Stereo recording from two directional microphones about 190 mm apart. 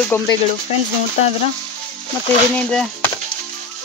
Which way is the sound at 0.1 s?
10° left (ahead or behind).